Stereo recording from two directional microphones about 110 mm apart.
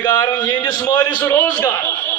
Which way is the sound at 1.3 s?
20° left (ahead or behind).